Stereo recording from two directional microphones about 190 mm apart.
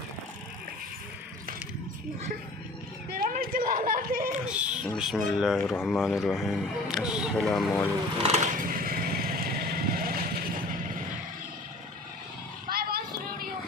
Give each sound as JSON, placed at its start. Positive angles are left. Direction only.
{"t": 3.1, "sound": "a sound", "side_deg": -45}
{"t": 4.4, "sound": "a sound", "side_deg": -5}
{"t": 4.9, "sound": "speech", "side_deg": 0}
{"t": 5.7, "sound": "speech", "side_deg": 10}
{"t": 6.0, "sound": "speech", "side_deg": 0}
{"t": 8.2, "sound": "speech", "side_deg": -35}
{"t": 8.5, "sound": "vehicle", "side_deg": -45}
{"t": 12.6, "sound": "vehicle", "side_deg": -55}